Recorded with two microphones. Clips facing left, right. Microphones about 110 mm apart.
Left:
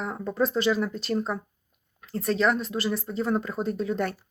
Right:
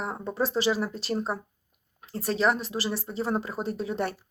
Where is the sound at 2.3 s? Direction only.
5° right (ahead or behind).